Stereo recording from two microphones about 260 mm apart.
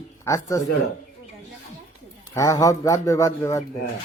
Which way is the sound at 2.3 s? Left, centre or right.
Centre.